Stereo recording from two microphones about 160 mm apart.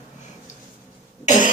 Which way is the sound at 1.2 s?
50° left (ahead or behind).